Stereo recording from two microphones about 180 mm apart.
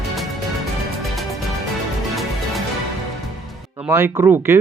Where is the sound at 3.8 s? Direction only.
10° right (ahead or behind).